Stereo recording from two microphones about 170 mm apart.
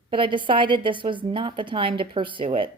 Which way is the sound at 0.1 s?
30° right (ahead or behind).